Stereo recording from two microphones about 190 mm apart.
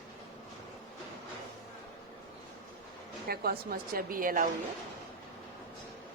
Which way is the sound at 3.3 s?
55° right (ahead or behind).